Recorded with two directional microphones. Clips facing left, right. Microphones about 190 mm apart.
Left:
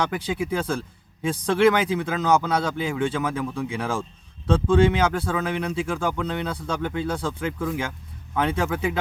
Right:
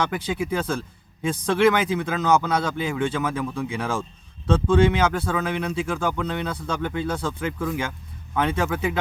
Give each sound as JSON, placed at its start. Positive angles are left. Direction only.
{"t": 0.0, "sound": "speech", "side_deg": 35}